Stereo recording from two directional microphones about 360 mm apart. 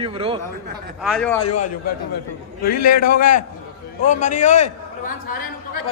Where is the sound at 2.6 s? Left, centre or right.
Left.